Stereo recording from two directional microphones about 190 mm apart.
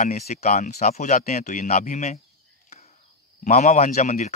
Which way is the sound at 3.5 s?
35° left (ahead or behind).